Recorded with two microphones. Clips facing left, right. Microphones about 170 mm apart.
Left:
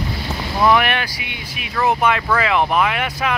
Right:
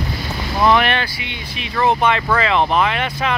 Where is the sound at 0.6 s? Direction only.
10° left (ahead or behind).